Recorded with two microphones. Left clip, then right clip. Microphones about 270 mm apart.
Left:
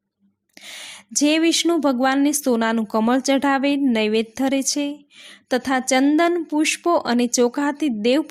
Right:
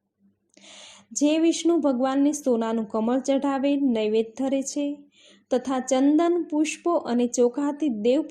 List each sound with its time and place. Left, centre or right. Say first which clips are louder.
0.6 s speech: left 10 dB; left